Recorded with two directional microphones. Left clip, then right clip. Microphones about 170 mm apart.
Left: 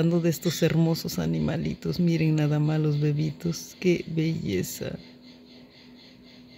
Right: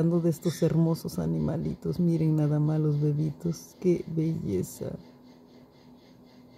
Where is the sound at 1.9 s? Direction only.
10° right (ahead or behind).